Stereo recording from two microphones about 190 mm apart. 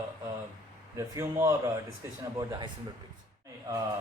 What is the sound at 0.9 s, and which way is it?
Speech, 15° right (ahead or behind).